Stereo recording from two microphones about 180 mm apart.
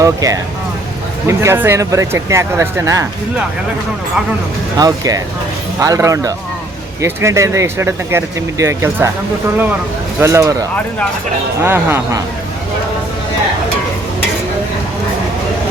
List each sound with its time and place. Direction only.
0.0 s speech: 20° right (ahead or behind)
4.8 s speech: 20° right (ahead or behind)
10.2 s speech: 15° right (ahead or behind)